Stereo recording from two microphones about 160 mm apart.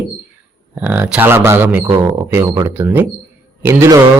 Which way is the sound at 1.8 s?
25° right (ahead or behind).